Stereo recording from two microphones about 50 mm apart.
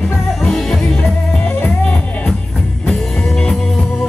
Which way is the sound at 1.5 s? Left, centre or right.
Left.